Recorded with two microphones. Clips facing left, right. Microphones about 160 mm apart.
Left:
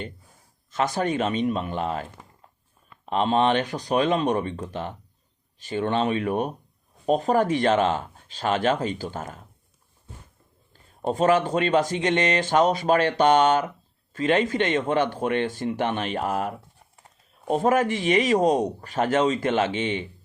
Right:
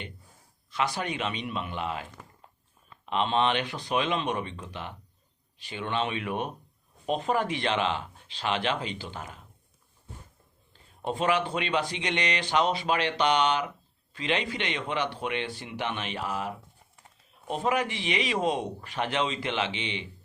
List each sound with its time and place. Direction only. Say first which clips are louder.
0.7 s speech: left 6 dB; 45° left (ahead or behind)
3.1 s speech: left 5 dB; 40° left (ahead or behind)
11.0 s speech: left 6 dB; 40° left (ahead or behind)